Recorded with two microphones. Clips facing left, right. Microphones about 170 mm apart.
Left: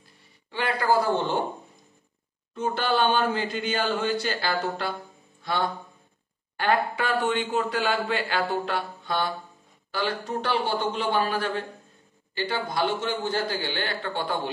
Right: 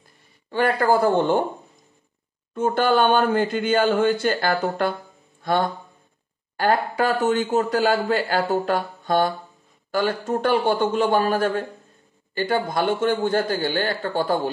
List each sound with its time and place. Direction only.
0.5 s speech: 50° right (ahead or behind)
2.5 s speech: 50° right (ahead or behind)
5.4 s music: 50° right (ahead or behind)
6.5 s speech: 40° right (ahead or behind)